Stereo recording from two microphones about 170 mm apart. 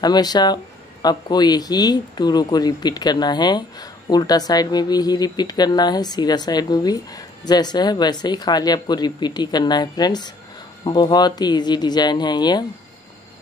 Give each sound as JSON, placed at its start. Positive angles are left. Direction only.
{"t": 0.0, "sound": "speech", "side_deg": 25}